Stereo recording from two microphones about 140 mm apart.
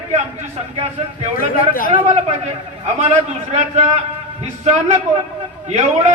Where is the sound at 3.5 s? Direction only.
45° right (ahead or behind).